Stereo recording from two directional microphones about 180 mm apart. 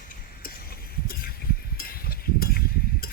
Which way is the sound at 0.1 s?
55° left (ahead or behind).